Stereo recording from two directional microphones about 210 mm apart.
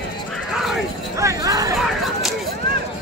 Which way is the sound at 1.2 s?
15° right (ahead or behind).